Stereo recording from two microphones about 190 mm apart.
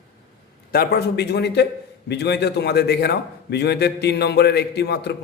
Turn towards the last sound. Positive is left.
turn(degrees=60)  # may be behind; listen again after turning